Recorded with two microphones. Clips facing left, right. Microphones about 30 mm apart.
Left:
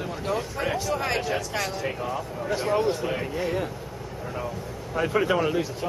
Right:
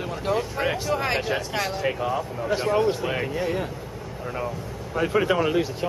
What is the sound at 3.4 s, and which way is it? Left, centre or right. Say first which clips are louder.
Speech: right 1 dB; centre.